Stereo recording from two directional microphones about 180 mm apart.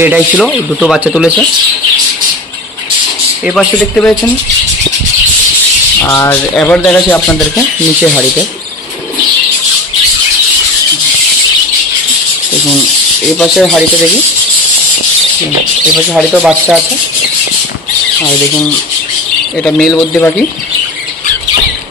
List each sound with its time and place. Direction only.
0.0 s speech: 10° right (ahead or behind)
3.4 s speech: 5° left (ahead or behind)
5.9 s a man's voice: 15° left (ahead or behind)
13.4 s speech: centre (ahead or behind)
16.1 s speech: 5° right (ahead or behind)
19.6 s speech: centre (ahead or behind)